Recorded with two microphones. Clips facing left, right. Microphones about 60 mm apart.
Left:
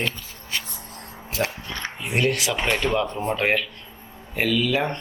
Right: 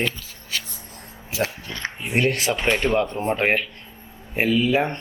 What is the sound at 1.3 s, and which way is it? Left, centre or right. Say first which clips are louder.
Music: right 1 dB; left.